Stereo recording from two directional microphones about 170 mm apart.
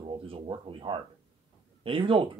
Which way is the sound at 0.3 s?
30° right (ahead or behind).